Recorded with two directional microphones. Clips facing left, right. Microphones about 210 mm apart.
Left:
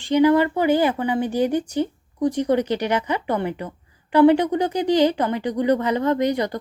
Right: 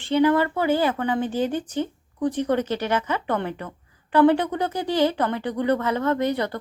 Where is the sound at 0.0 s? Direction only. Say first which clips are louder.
Left 3 dB; 15° left (ahead or behind).